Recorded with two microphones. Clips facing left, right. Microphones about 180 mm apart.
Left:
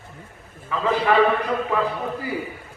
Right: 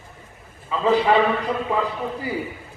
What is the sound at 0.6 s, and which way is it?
Speech, 20° right (ahead or behind).